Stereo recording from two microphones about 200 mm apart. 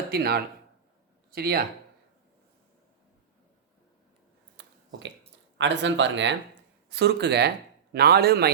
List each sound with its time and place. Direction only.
0.1 s a man's voice: 50° right (ahead or behind)
4.5 s a sound: 65° right (ahead or behind)
5.5 s a man's voice: 65° right (ahead or behind)